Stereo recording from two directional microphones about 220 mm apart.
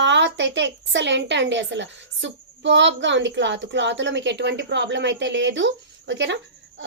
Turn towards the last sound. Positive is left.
turn(degrees=-55)  # may be behind; listen again after turning